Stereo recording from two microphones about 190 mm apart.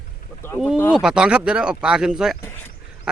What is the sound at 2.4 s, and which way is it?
Speech, 15° left (ahead or behind).